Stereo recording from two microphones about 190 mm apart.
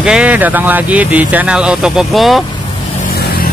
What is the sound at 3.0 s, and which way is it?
Vehicle, 55° left (ahead or behind).